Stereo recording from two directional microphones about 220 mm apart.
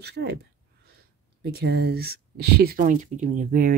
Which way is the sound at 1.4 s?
45° right (ahead or behind).